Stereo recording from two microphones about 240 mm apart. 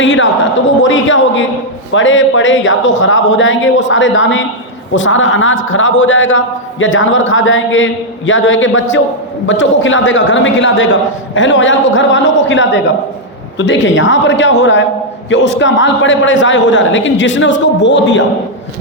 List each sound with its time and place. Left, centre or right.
0.0 s a man's voice: left